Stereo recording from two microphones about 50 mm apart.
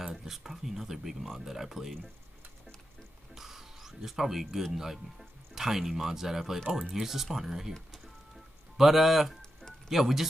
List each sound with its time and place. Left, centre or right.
0.0 s speech: centre
3.3 s a sound: centre
4.7 s speech: centre
8.7 s speech: centre
9.4 s a sound: centre
9.8 s speech: centre